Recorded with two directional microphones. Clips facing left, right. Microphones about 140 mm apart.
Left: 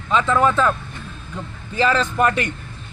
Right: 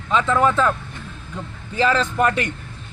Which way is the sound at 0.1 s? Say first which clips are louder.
Left 1 dB; centre (ahead or behind).